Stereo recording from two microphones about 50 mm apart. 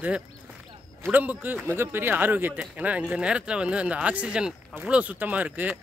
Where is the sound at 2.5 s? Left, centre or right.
Right.